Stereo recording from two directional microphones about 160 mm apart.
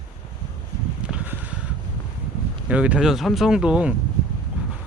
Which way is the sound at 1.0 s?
10° right (ahead or behind).